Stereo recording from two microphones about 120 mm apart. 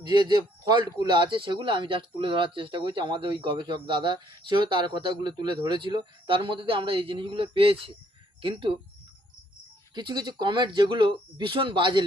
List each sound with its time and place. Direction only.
0.0 s speech: 40° right (ahead or behind)
9.9 s speech: 35° right (ahead or behind)